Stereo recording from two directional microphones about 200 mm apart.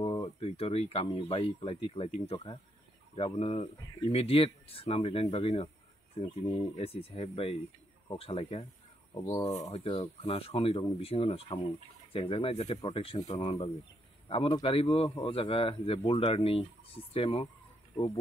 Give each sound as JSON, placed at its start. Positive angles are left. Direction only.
{"t": 0.0, "sound": "speech", "side_deg": 25}
{"t": 9.1, "sound": "speech", "side_deg": 20}
{"t": 9.6, "sound": "speech", "side_deg": 30}